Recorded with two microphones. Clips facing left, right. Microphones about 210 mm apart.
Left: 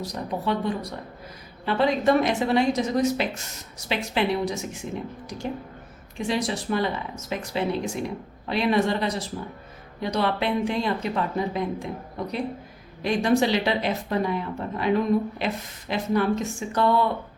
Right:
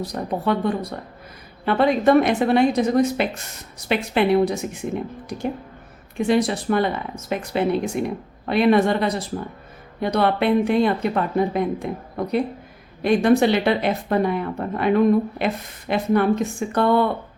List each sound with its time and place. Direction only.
0.0 s a woman's voice: 55° right (ahead or behind)